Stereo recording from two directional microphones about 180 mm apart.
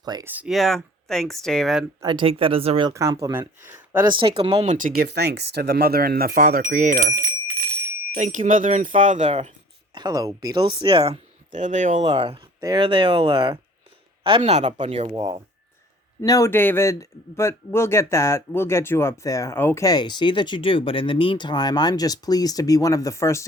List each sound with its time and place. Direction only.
0.0 s speech: 20° right (ahead or behind)
0.3 s speech: 5° right (ahead or behind)
2.0 s speech: 25° right (ahead or behind)
2.9 s speech: 15° right (ahead or behind)
4.0 s speech: 25° right (ahead or behind)
4.7 s speech: 50° right (ahead or behind)
9.9 s speech: 25° right (ahead or behind)
16.2 s speech: 20° left (ahead or behind)